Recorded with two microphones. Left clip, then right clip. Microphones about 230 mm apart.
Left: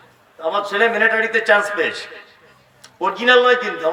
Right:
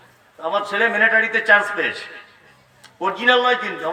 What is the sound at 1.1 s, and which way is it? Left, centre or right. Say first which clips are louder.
A man's voice: even; left.